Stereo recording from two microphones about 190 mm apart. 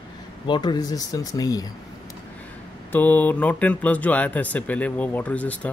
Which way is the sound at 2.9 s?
10° left (ahead or behind).